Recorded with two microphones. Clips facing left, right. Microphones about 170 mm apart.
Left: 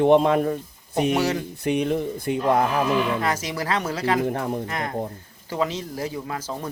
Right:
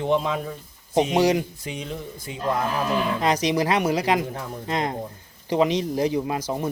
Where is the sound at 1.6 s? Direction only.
65° left (ahead or behind).